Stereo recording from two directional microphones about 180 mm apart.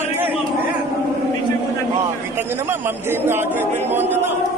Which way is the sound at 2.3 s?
15° right (ahead or behind).